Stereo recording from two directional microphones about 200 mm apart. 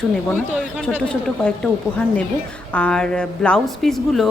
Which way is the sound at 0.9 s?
5° left (ahead or behind).